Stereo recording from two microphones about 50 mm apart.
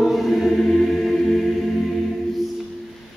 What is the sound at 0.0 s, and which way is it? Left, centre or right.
Choir, centre.